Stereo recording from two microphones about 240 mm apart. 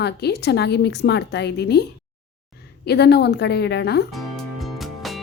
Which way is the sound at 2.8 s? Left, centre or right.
Left.